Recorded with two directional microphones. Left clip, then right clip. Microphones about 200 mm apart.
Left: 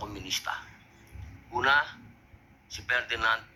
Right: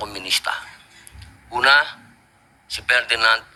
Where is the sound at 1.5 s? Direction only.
50° right (ahead or behind).